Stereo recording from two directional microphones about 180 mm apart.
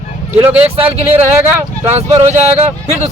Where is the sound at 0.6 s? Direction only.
35° right (ahead or behind).